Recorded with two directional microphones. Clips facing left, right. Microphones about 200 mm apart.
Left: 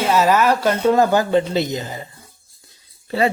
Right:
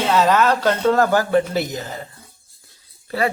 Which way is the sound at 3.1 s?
25° left (ahead or behind).